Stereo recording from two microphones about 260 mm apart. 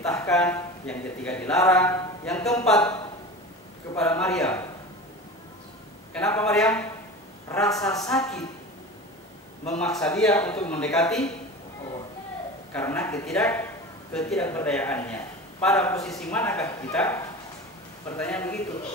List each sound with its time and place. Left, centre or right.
0.0 s speech: centre
6.1 s a man's voice: centre
9.8 s a man's voice: centre
12.7 s a man's voice: centre